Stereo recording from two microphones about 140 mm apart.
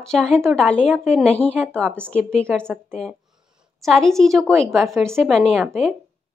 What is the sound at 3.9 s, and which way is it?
Speech, 5° left (ahead or behind).